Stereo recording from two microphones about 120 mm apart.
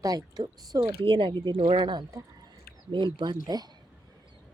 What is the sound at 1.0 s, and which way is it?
Speech, 45° right (ahead or behind).